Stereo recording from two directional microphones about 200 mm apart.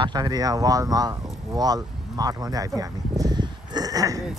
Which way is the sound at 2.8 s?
20° right (ahead or behind).